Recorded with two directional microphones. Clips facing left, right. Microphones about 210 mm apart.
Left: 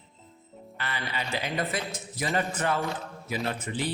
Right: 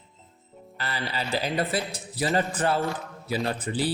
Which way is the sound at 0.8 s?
35° right (ahead or behind).